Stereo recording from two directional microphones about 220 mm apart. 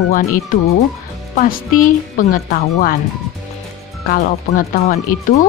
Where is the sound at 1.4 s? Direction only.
40° left (ahead or behind).